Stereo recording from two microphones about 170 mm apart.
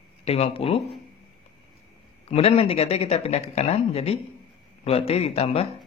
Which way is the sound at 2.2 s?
35° left (ahead or behind).